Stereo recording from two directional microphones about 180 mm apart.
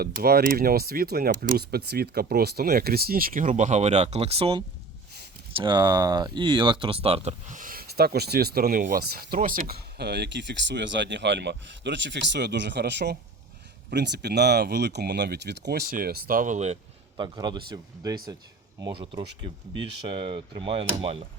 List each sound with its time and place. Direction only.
0.0 s speech: 60° right (ahead or behind); by 16.7 s 40° right (ahead or behind)
17.2 s speech: 20° right (ahead or behind)